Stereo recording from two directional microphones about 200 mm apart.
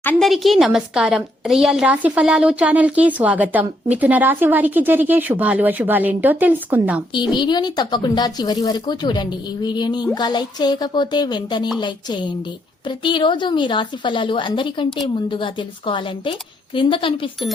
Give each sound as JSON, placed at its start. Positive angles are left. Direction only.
{"t": 0.0, "sound": "a woman's voice", "side_deg": 5}
{"t": 7.1, "sound": "speech", "side_deg": 25}